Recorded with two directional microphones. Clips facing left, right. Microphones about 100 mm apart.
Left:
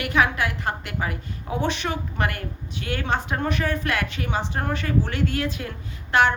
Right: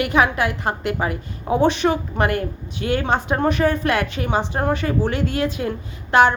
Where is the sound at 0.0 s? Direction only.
20° right (ahead or behind).